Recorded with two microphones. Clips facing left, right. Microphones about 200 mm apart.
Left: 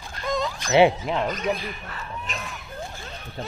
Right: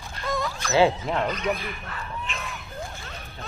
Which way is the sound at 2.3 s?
40° left (ahead or behind).